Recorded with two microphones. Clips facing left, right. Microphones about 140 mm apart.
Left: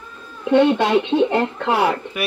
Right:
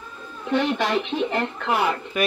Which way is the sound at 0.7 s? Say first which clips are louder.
Left 6 dB; 25° left (ahead or behind).